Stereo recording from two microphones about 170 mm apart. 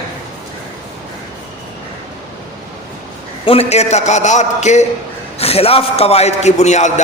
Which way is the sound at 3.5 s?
35° left (ahead or behind).